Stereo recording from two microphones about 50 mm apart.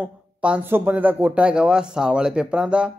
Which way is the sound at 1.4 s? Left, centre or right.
Centre.